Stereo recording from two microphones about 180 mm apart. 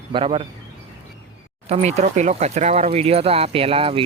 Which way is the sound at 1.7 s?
40° right (ahead or behind).